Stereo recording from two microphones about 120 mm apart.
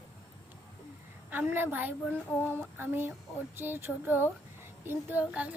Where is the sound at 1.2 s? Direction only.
15° right (ahead or behind).